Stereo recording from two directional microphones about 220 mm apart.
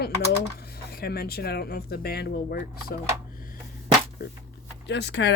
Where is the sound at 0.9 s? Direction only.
45° left (ahead or behind).